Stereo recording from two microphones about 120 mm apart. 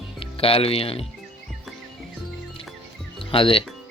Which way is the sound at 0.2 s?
50° left (ahead or behind).